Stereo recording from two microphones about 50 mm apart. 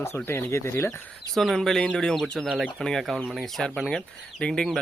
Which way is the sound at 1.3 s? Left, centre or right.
Centre.